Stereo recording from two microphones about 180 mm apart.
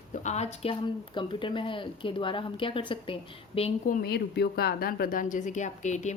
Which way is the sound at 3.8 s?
60° left (ahead or behind).